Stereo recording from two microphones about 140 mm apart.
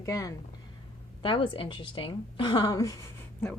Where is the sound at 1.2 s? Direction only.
40° left (ahead or behind).